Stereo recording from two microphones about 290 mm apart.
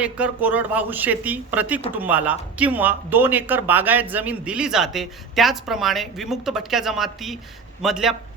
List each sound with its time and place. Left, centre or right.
0.0 s speech: centre